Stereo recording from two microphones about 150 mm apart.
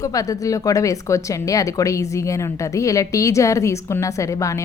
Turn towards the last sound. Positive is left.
turn(degrees=20)  # may be behind; listen again after turning